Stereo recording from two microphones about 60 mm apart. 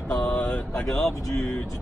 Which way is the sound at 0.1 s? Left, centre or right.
Left.